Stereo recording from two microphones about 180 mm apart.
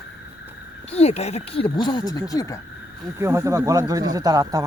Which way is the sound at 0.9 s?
35° left (ahead or behind).